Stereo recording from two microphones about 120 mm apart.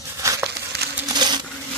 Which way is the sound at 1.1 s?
40° right (ahead or behind).